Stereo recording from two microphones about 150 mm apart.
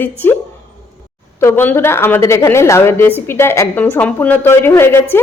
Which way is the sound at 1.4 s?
15° left (ahead or behind).